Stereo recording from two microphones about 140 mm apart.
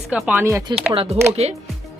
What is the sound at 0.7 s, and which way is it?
Speech, 35° right (ahead or behind).